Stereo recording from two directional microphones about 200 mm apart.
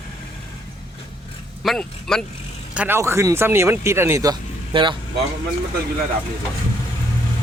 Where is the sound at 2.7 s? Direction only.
10° right (ahead or behind).